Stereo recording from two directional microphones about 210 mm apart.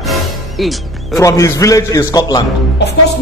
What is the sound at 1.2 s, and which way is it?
A man's voice, 15° left (ahead or behind).